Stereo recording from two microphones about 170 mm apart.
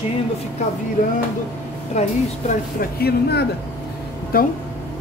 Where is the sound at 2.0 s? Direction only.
45° left (ahead or behind).